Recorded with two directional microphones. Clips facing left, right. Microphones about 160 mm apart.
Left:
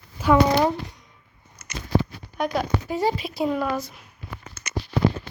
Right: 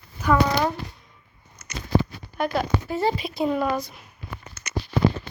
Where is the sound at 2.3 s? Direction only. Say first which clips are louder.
Even; 5° right (ahead or behind).